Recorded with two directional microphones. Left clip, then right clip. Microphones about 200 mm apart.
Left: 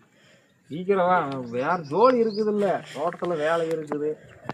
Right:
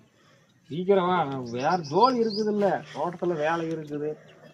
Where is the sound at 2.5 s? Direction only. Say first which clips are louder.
Left 1 dB; centre (ahead or behind).